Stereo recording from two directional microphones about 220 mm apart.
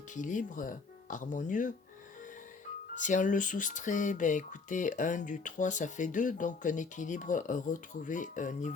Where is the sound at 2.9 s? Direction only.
35° left (ahead or behind).